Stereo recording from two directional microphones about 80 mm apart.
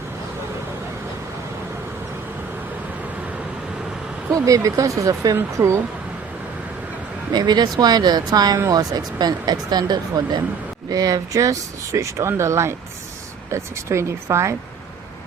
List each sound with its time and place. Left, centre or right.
4.3 s speech: right
7.3 s speech: right
10.8 s speech: right